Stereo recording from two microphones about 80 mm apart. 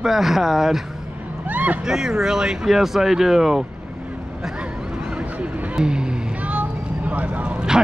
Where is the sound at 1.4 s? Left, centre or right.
Centre.